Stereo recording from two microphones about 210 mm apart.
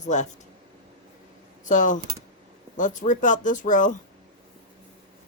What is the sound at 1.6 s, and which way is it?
Speech, 35° left (ahead or behind).